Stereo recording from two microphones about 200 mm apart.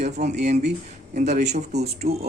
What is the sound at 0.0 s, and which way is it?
Speech, 35° right (ahead or behind).